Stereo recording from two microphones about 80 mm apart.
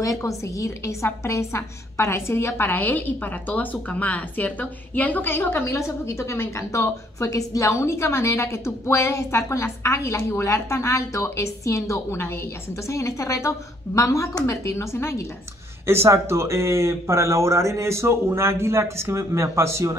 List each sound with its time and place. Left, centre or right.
0.0 s a woman's voice: left
5.7 s a woman's voice: left
15.9 s speech: right